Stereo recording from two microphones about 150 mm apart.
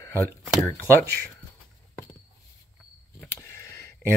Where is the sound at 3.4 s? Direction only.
20° left (ahead or behind).